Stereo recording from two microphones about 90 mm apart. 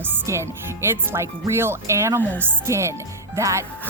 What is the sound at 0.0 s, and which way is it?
Speech, 30° right (ahead or behind).